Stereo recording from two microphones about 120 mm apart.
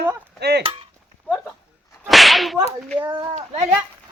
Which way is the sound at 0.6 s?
50° right (ahead or behind).